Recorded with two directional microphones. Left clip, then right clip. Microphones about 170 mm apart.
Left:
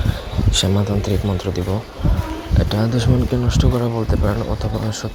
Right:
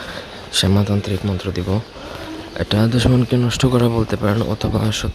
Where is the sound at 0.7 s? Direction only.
15° right (ahead or behind).